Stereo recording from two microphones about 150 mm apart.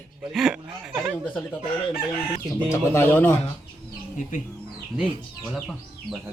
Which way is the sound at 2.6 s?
15° left (ahead or behind).